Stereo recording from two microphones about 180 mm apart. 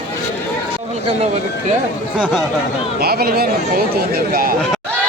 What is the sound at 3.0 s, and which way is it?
Speech, 60° right (ahead or behind).